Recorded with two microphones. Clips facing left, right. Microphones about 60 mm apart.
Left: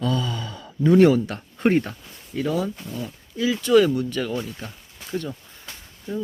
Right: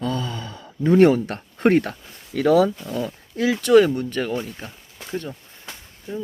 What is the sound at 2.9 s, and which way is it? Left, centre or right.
Speech, right.